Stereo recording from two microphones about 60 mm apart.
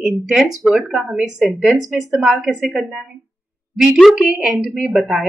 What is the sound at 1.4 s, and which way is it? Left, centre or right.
Speech, centre.